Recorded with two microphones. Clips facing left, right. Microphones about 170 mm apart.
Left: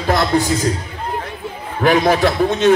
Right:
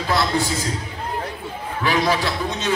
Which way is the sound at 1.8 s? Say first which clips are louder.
Left 7 dB; 55° left (ahead or behind).